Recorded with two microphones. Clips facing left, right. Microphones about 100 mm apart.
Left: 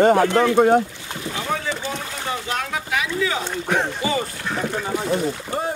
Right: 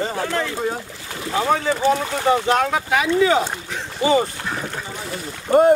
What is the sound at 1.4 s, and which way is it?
Speech, 50° right (ahead or behind).